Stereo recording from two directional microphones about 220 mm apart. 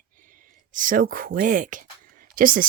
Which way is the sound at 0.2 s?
35° right (ahead or behind).